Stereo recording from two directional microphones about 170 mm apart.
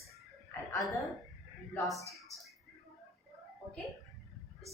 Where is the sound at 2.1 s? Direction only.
Centre (ahead or behind).